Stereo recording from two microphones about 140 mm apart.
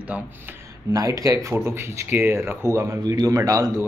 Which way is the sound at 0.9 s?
25° right (ahead or behind).